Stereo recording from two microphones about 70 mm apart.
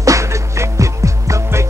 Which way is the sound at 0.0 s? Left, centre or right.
Right.